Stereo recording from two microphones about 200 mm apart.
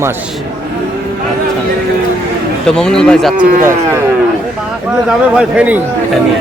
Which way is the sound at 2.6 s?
5° left (ahead or behind).